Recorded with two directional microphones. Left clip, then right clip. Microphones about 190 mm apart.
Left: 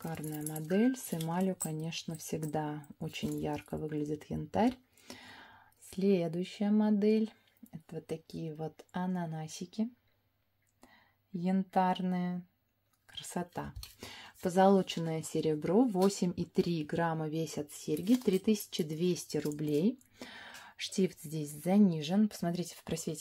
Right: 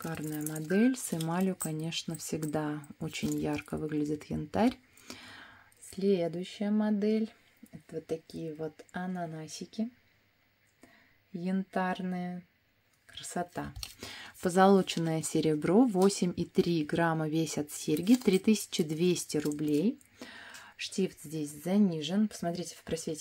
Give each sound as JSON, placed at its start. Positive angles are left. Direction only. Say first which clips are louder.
{"t": 0.0, "sound": "speech", "louder": "right 4 dB", "side_deg": -10}
{"t": 11.3, "sound": "speech", "louder": "left 3 dB", "side_deg": 0}